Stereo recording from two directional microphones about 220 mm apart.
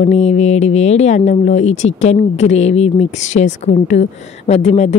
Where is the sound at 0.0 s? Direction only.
30° left (ahead or behind).